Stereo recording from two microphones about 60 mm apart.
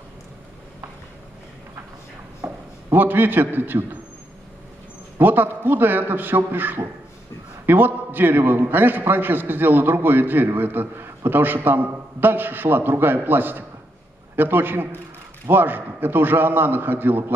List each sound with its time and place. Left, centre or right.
2.9 s a man's voice: right
5.2 s a man's voice: right